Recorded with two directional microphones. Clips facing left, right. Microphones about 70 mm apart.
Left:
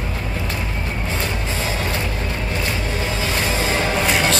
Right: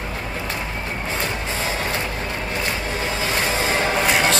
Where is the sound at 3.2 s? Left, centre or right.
Right.